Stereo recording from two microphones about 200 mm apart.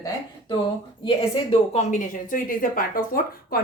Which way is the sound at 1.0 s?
30° left (ahead or behind).